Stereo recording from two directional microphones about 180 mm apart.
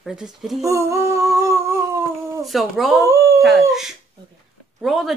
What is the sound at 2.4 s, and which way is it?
Speech, centre (ahead or behind).